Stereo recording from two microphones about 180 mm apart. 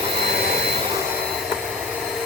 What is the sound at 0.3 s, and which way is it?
Jet engine, 60° right (ahead or behind).